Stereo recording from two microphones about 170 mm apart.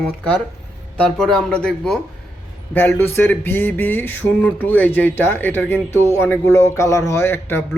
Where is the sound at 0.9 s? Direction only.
5° left (ahead or behind).